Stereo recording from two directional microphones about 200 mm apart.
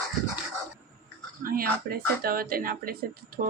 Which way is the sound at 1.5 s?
50° right (ahead or behind).